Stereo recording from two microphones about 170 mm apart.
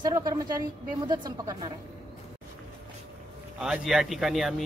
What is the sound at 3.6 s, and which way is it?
A man's voice, 5° right (ahead or behind).